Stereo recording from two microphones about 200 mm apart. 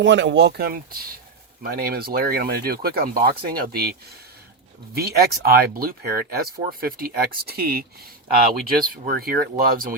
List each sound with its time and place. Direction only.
0.0 s speech: 65° right (ahead or behind); by 3.8 s 45° right (ahead or behind)
4.9 s speech: 50° right (ahead or behind)